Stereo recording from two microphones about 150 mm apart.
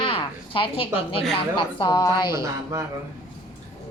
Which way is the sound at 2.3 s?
20° right (ahead or behind).